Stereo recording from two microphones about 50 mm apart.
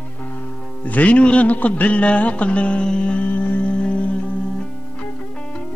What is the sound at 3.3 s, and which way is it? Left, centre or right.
Music, left.